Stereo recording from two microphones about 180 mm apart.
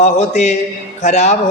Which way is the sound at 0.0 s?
40° left (ahead or behind).